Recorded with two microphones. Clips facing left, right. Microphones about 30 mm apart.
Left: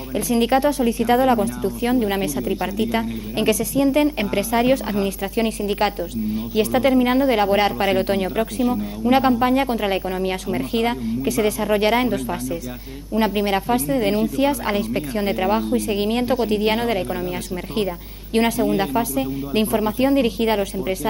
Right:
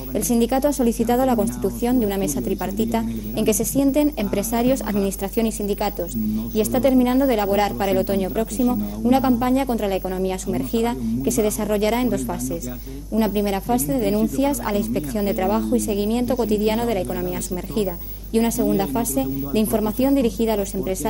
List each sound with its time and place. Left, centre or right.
0.1 s speech: left
18.3 s speech: left